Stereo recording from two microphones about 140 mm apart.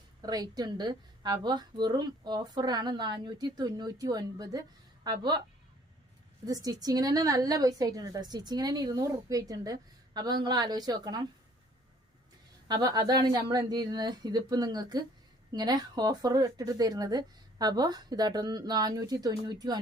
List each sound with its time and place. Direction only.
0.2 s a woman's voice: 25° right (ahead or behind)
6.4 s a woman's voice: 25° right (ahead or behind)
12.6 s a woman's voice: 30° right (ahead or behind)